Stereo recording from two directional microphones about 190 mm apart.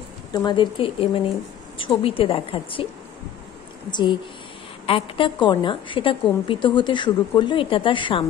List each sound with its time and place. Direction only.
0.3 s a woman's voice: 20° left (ahead or behind)
3.9 s a woman's voice: 25° left (ahead or behind)